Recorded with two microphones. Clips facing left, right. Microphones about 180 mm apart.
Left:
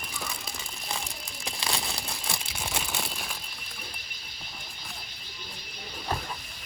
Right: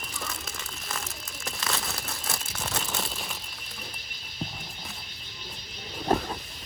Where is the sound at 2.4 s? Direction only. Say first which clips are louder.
Right 1 dB; 15° left (ahead or behind).